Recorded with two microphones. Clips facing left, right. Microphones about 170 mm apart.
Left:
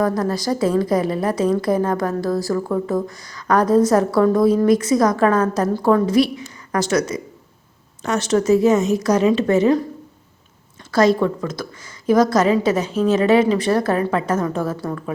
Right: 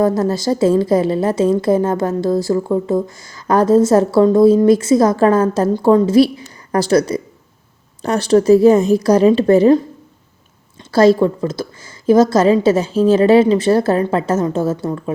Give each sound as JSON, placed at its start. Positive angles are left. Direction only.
{"t": 0.0, "sound": "a woman's voice", "side_deg": -25}
{"t": 10.9, "sound": "a woman's voice", "side_deg": -30}